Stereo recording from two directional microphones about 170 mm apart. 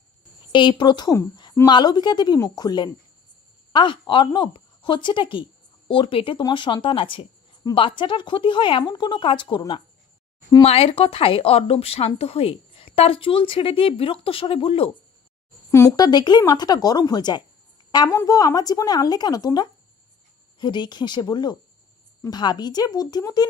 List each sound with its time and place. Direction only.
0.5 s a woman's voice: 25° left (ahead or behind)
15.7 s a woman's voice: 20° left (ahead or behind)